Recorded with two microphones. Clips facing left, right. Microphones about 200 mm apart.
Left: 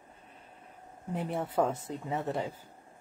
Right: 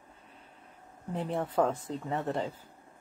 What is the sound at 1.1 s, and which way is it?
Speech, 10° left (ahead or behind).